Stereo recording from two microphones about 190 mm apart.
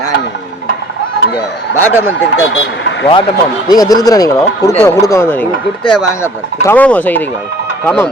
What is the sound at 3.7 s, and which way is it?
Speech, 20° left (ahead or behind).